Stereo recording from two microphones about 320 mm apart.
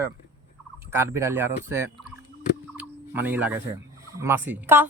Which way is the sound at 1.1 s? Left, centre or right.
Centre.